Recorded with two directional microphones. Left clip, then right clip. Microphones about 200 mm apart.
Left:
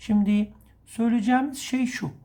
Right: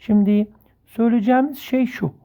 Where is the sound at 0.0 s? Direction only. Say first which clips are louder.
Right 6 dB; 45° right (ahead or behind).